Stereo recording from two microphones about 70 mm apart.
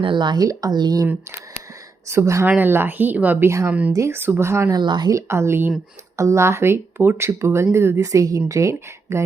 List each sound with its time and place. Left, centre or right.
0.2 s speech: right
0.4 s speech: right
2.0 s speech: right
2.6 s speech: right
3.4 s speech: right
3.7 s speech: right
4.1 s speech: right
4.7 s speech: right
5.1 s speech: right